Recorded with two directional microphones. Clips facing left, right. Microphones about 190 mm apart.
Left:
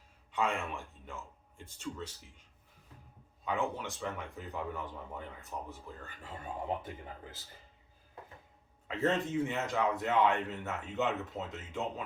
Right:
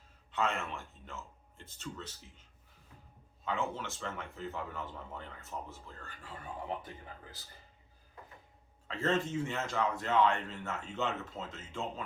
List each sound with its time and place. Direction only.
0.3 s a man's voice: 10° left (ahead or behind)
3.4 s a man's voice: 15° left (ahead or behind)
8.9 s a man's voice: 20° left (ahead or behind)